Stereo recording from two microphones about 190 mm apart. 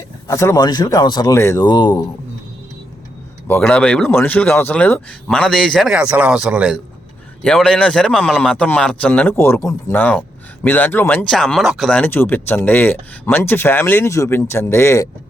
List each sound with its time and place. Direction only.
0.3 s a man's voice: 15° left (ahead or behind)
3.4 s a man's voice: 10° left (ahead or behind)